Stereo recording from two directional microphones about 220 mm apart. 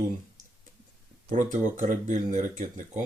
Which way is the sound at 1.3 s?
35° right (ahead or behind).